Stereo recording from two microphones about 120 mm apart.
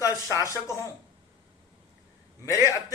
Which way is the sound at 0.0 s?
25° left (ahead or behind).